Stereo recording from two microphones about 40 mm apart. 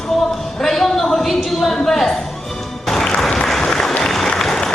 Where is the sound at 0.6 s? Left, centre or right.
Centre.